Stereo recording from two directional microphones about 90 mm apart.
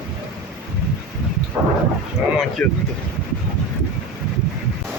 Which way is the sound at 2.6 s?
15° left (ahead or behind).